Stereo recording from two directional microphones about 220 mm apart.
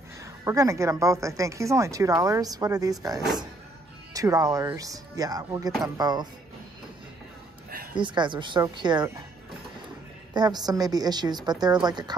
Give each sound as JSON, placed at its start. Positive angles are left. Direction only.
{"t": 0.2, "sound": "a woman's voice", "side_deg": -15}
{"t": 7.9, "sound": "a woman's voice", "side_deg": -20}
{"t": 10.3, "sound": "a woman's voice", "side_deg": -20}